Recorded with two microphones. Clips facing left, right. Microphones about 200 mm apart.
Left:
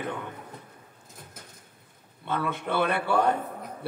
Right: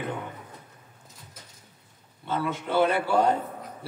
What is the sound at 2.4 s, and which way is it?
Speech, 60° left (ahead or behind).